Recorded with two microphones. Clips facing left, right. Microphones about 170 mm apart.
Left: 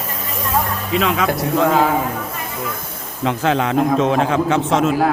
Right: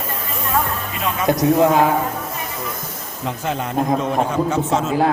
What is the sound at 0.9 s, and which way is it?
Speech, 90° left.